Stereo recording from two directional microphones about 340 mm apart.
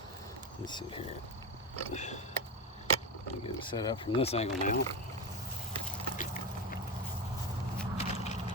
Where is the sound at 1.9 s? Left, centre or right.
Centre.